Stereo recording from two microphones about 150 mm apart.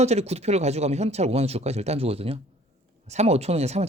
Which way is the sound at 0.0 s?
45° right (ahead or behind).